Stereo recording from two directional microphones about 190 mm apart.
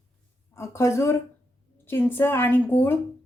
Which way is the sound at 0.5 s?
15° left (ahead or behind).